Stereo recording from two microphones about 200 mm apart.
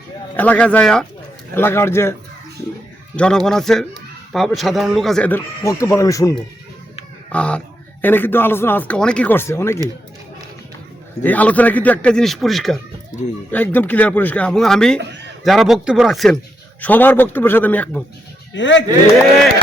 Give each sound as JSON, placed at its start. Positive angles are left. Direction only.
{"t": 0.3, "sound": "speech", "side_deg": 5}
{"t": 3.2, "sound": "speech", "side_deg": 5}
{"t": 7.3, "sound": "speech", "side_deg": 5}
{"t": 11.2, "sound": "speech", "side_deg": 10}
{"t": 18.5, "sound": "speech", "side_deg": 65}